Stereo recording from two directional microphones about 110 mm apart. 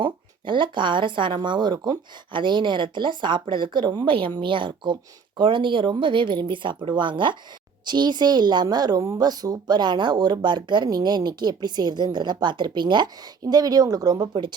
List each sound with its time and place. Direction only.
0.0 s a woman's voice: 45° right (ahead or behind)